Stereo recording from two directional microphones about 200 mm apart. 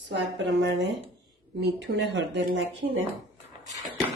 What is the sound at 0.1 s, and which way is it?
Speech, 60° right (ahead or behind).